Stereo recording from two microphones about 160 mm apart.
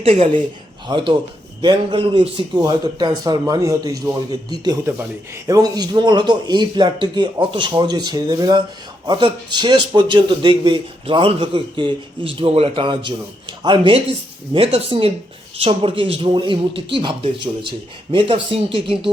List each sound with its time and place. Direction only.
0.0 s a man's voice: 35° right (ahead or behind)
4.9 s a man's voice: 15° right (ahead or behind); by 19.1 s 35° right (ahead or behind)